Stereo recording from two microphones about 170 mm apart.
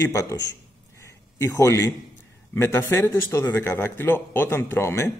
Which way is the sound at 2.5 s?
15° left (ahead or behind).